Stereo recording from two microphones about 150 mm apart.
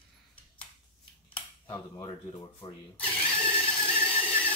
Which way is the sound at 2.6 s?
25° left (ahead or behind).